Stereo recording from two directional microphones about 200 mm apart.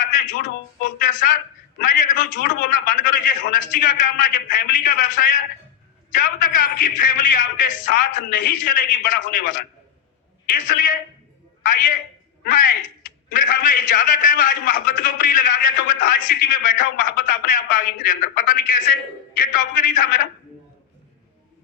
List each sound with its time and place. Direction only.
0.1 s a man's voice: 45° left (ahead or behind)